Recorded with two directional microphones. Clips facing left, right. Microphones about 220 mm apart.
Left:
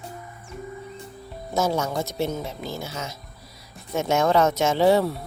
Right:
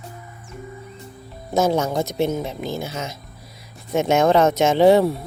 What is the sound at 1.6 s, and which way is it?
Speech, 20° right (ahead or behind).